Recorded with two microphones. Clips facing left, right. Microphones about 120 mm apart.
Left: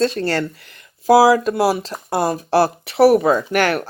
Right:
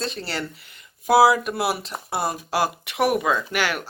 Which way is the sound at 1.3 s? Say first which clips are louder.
Left 7 dB; 40° left (ahead or behind).